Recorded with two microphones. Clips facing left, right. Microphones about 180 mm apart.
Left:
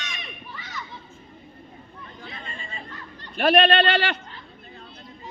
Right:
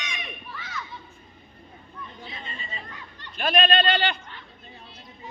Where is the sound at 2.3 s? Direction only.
50° left (ahead or behind).